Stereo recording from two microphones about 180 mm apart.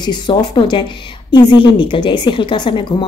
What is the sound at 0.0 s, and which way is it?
A woman's voice, 25° left (ahead or behind).